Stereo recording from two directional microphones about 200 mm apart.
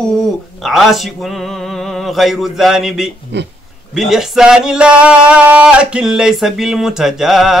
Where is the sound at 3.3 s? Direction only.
60° right (ahead or behind).